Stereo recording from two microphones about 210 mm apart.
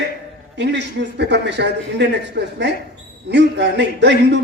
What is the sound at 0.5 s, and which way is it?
A man's voice, 55° right (ahead or behind).